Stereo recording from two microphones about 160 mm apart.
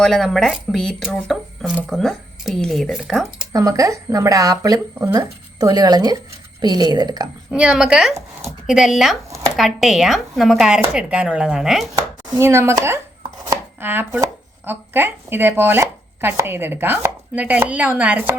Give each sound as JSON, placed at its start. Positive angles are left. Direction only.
{"t": 0.0, "sound": "speech", "side_deg": 0}
{"t": 3.5, "sound": "speech", "side_deg": -20}
{"t": 7.5, "sound": "speech", "side_deg": -5}
{"t": 12.3, "sound": "speech", "side_deg": -15}
{"t": 13.2, "sound": "chopping", "side_deg": -25}
{"t": 13.8, "sound": "speech", "side_deg": -10}